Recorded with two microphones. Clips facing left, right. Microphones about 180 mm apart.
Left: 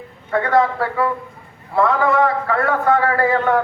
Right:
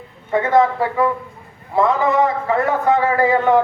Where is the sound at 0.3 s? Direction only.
20° right (ahead or behind).